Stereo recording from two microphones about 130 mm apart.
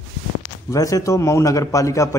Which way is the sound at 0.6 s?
25° left (ahead or behind).